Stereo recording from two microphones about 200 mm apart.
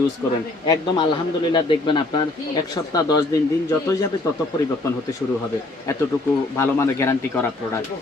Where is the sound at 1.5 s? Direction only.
25° left (ahead or behind).